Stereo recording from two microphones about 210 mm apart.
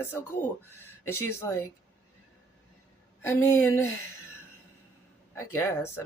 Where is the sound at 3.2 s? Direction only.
15° left (ahead or behind).